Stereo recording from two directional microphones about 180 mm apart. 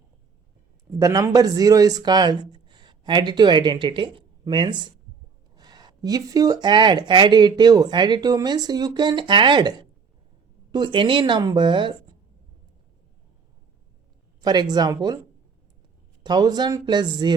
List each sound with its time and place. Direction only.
0.9 s speech: 20° right (ahead or behind)
14.4 s speech: 25° right (ahead or behind)
16.2 s speech: 25° right (ahead or behind)